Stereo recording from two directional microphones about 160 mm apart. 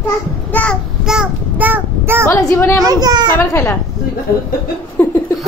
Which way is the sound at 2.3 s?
20° left (ahead or behind).